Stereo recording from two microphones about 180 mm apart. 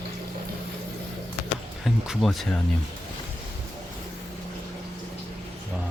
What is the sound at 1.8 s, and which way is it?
Speech, centre (ahead or behind).